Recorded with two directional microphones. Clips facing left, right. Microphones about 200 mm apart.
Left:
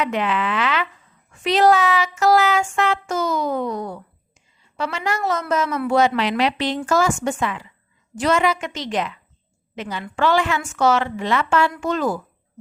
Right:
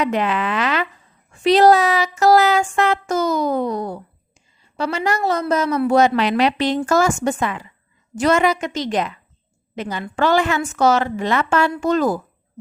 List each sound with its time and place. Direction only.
0.0 s a woman's voice: 40° right (ahead or behind)